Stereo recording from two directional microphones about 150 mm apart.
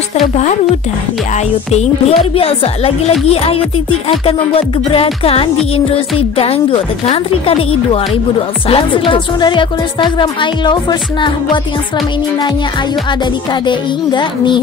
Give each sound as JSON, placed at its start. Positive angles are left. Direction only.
{"t": 1.7, "sound": "music", "side_deg": 45}
{"t": 13.5, "sound": "music", "side_deg": 30}